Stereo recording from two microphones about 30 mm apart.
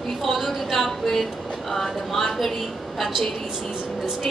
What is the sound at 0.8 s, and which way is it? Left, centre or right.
A woman's voice, centre.